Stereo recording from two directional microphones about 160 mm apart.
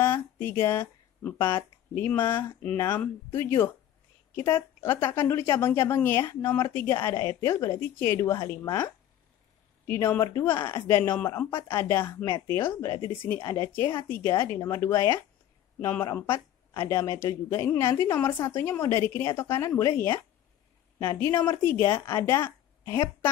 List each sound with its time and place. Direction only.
0.0 s a woman's voice: 15° left (ahead or behind)